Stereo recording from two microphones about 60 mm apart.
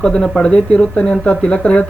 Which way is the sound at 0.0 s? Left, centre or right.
Centre.